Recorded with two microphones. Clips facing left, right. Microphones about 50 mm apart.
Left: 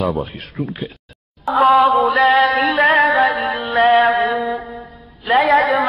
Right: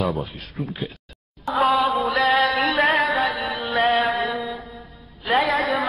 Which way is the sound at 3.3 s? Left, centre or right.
Left.